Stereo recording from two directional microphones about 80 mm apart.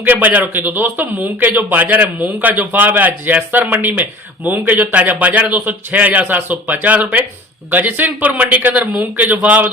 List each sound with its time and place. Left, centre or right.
0.0 s a man's voice: right